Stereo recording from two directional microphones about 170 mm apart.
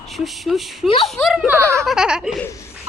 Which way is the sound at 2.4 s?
15° left (ahead or behind).